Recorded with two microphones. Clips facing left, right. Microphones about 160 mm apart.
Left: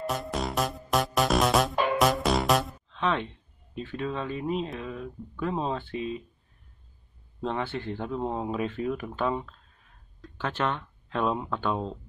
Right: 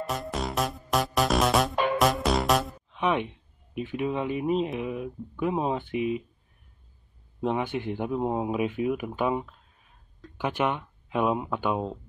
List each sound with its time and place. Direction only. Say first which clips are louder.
0.0 s music: even; centre (ahead or behind)
2.9 s speech: right 2 dB; 15° right (ahead or behind)
7.4 s speech: right 3 dB; 15° right (ahead or behind)